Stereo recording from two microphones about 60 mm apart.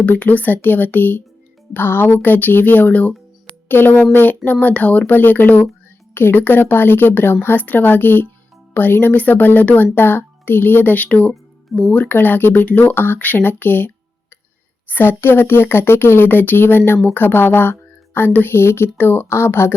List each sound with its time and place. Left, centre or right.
0.0 s speech: left